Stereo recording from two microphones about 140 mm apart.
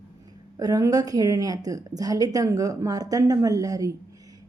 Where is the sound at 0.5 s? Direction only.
25° right (ahead or behind).